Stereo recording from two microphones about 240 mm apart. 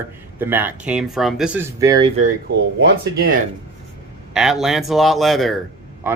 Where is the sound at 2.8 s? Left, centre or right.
Right.